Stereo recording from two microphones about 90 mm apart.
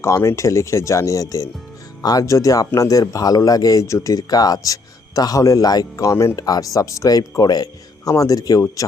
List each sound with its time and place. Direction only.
0.0 s a man's voice: 30° left (ahead or behind)